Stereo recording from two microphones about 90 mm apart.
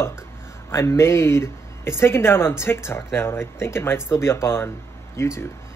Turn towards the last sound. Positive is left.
turn(degrees=30)  # may be behind; listen again after turning